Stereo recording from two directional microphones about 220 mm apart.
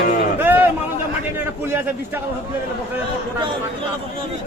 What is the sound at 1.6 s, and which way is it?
Speech, 10° right (ahead or behind).